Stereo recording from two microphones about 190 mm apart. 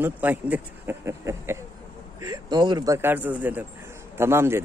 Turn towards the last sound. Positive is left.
turn(degrees=-15)  # may be behind; listen again after turning